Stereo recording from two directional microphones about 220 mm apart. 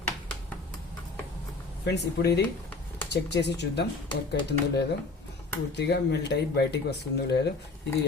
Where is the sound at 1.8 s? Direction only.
50° left (ahead or behind).